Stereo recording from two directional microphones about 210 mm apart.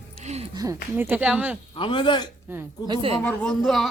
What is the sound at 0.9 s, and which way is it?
Speech, 10° right (ahead or behind).